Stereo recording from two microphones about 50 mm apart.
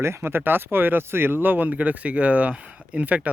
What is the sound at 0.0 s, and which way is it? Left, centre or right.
Speech, right.